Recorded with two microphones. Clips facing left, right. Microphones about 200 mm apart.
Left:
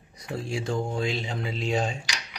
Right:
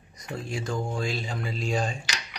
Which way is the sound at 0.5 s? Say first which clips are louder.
Left 2 dB; 25° left (ahead or behind).